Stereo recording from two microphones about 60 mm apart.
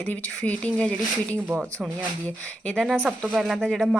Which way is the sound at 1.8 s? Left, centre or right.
Centre.